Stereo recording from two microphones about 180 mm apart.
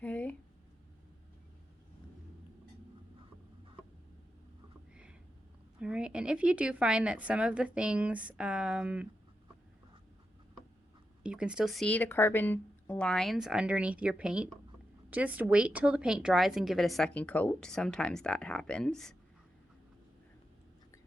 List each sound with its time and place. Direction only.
0.0 s a sound: 10° left (ahead or behind)
5.8 s speech: 5° right (ahead or behind)
11.2 s speech: 5° right (ahead or behind)